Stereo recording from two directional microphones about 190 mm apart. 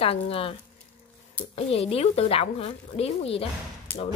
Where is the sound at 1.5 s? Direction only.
30° left (ahead or behind).